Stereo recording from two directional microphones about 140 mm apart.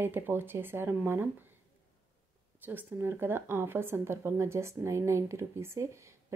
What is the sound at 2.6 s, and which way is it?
A woman's voice, 15° right (ahead or behind).